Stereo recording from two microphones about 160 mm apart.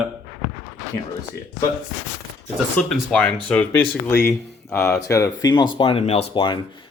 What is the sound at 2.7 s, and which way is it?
Speech, 10° left (ahead or behind).